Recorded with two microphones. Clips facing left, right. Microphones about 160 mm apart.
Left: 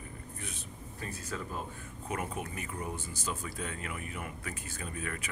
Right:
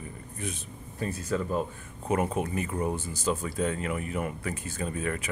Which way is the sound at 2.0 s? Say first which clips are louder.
Right 9 dB; 25° right (ahead or behind).